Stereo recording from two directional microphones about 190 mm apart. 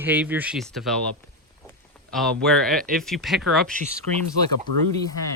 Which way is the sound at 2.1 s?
Centre (ahead or behind).